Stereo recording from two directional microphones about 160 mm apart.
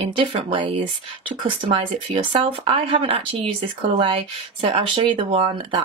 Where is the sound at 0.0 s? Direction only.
35° right (ahead or behind).